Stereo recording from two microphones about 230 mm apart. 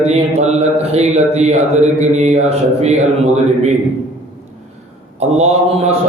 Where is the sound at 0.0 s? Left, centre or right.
Right.